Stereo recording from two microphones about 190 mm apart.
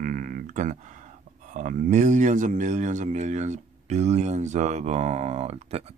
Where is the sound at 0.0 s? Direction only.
45° right (ahead or behind).